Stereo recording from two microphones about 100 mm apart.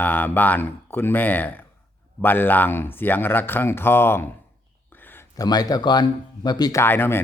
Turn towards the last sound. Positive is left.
turn(degrees=25)  # may be behind; listen again after turning